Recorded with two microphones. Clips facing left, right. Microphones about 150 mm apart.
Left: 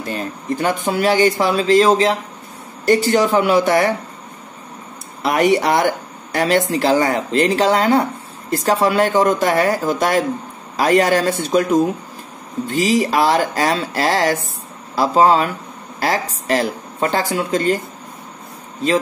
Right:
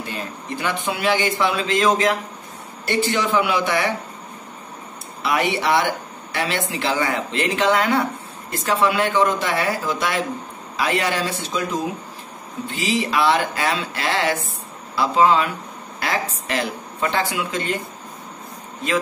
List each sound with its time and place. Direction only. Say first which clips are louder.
0.1 s speech: left 6 dB; 45° left (ahead or behind)
2.8 s speech: left 7 dB; 40° left (ahead or behind)
5.2 s a woman's voice: left 6 dB; 45° left (ahead or behind)